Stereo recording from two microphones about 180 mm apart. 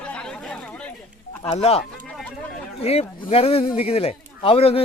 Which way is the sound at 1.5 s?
35° left (ahead or behind).